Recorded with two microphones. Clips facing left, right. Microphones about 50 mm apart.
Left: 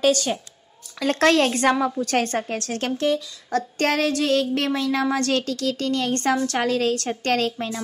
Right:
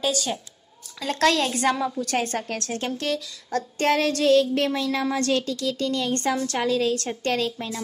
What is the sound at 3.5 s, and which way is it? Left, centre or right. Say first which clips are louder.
A woman's voice: even; left.